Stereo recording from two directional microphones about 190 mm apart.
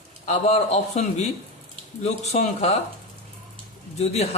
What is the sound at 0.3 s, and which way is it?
Speech, 35° left (ahead or behind).